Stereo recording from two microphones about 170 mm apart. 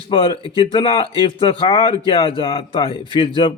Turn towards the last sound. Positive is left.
turn(degrees=30)  # may be behind; listen again after turning